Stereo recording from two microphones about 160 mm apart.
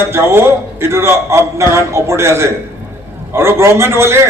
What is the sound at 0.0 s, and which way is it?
A man's voice, 15° right (ahead or behind).